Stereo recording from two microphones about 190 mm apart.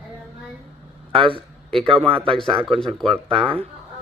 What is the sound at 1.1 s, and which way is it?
A man's voice, 25° right (ahead or behind).